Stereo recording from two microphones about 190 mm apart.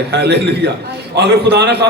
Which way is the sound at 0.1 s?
60° right (ahead or behind).